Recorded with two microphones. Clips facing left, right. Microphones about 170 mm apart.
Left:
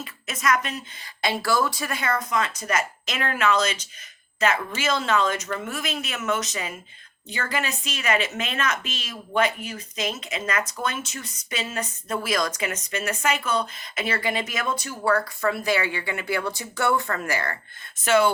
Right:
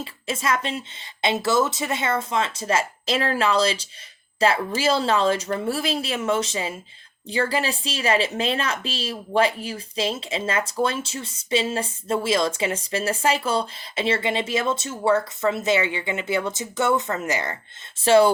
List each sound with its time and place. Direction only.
0.0 s speech: 30° right (ahead or behind)
18.0 s speech: 30° right (ahead or behind)